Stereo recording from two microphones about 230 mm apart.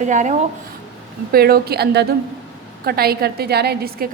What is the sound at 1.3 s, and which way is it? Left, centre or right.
A woman's voice, right.